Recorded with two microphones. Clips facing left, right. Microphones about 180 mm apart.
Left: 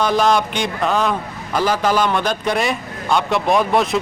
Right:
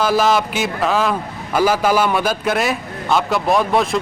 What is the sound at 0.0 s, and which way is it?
Speech, 5° right (ahead or behind).